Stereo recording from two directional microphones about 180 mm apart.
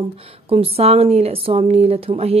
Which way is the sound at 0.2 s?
30° right (ahead or behind).